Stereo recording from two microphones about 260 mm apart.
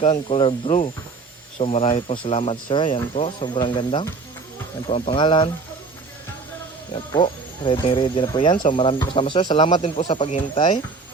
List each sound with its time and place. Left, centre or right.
0.0 s speech: centre
6.9 s speech: centre